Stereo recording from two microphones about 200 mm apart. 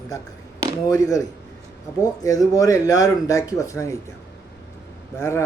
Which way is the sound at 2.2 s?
15° left (ahead or behind).